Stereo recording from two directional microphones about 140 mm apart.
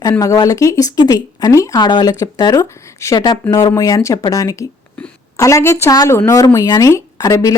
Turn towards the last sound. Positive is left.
turn(degrees=25)  # may be behind; listen again after turning